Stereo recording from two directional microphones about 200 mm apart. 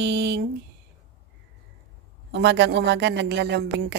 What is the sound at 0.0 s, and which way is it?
Speech, 60° right (ahead or behind).